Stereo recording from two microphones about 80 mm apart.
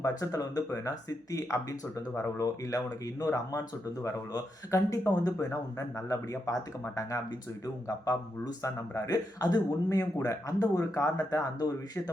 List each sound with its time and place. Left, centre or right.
0.0 s speech: left
4.7 s speech: left
8.6 s speech: left